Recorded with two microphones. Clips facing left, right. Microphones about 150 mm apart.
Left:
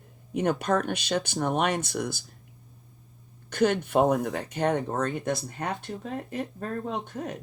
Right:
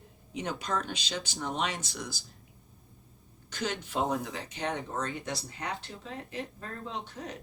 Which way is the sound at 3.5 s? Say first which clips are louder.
Left 10 dB; 55° left (ahead or behind).